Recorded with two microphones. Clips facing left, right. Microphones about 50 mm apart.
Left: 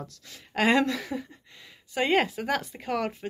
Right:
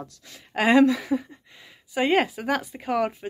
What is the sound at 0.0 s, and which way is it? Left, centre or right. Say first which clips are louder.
Speech: right 2 dB; centre.